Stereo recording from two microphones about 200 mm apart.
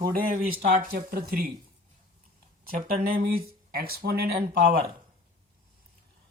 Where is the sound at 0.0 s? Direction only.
45° right (ahead or behind).